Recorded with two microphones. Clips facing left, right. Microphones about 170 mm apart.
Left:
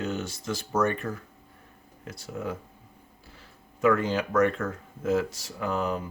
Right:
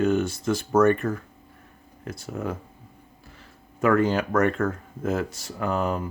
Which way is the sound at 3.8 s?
55° right (ahead or behind).